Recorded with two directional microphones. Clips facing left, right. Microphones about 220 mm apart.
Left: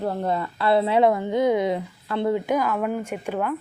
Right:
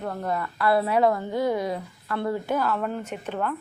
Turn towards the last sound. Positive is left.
turn(degrees=10)  # may be behind; listen again after turning